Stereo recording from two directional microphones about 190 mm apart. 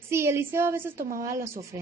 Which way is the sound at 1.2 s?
15° right (ahead or behind).